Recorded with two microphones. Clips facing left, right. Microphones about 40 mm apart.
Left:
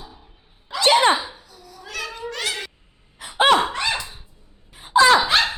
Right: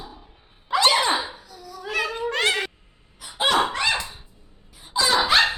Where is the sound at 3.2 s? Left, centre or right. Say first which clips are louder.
Left 6 dB; left.